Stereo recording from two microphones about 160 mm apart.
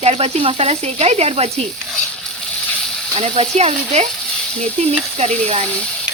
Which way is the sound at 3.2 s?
40° right (ahead or behind).